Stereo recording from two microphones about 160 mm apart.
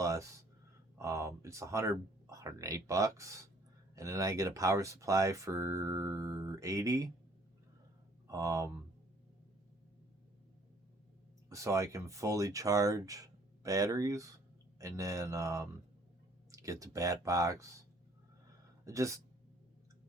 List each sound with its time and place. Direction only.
0.0 s a sound: 20° right (ahead or behind)
0.9 s speech: 20° right (ahead or behind)
8.3 s speech: 20° right (ahead or behind)
11.4 s speech: 20° right (ahead or behind)
18.9 s speech: 20° right (ahead or behind)